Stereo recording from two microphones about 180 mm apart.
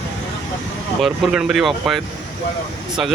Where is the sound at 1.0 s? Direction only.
5° right (ahead or behind).